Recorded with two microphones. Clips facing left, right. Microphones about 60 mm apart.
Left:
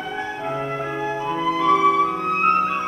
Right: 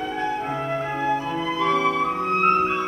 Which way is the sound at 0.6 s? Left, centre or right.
Centre.